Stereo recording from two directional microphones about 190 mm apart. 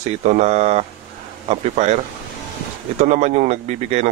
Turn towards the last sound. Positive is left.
turn(degrees=-35)  # may be behind; listen again after turning